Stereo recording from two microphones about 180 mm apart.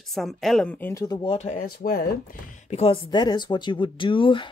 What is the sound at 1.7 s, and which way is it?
Speech, 55° left (ahead or behind).